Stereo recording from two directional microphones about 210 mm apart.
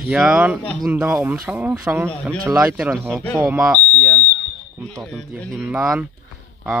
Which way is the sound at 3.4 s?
5° right (ahead or behind).